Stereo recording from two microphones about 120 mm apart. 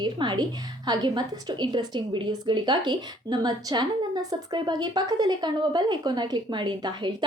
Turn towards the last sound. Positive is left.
turn(degrees=-40)  # may be behind; listen again after turning